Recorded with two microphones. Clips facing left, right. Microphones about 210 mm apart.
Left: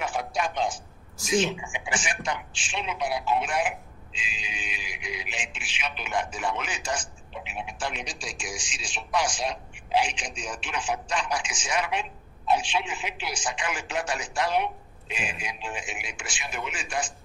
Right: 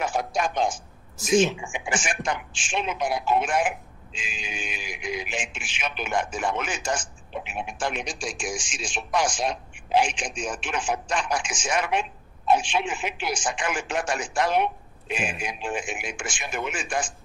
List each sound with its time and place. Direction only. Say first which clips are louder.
0.0 s a man's voice: right 3 dB; 40° right (ahead or behind)